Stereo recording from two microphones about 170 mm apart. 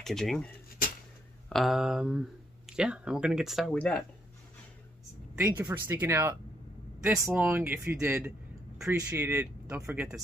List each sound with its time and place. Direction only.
0.0 s speech: centre (ahead or behind)
1.5 s speech: centre (ahead or behind)
5.4 s speech: 10° right (ahead or behind)